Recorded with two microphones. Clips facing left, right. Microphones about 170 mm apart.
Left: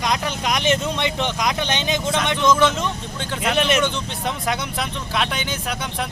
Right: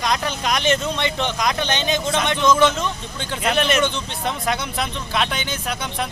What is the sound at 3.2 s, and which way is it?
Speech, 5° left (ahead or behind).